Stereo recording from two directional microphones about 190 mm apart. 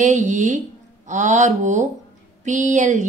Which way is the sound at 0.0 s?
40° right (ahead or behind).